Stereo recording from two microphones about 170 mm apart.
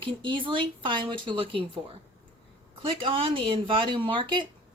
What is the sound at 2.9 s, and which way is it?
Speech, 30° right (ahead or behind).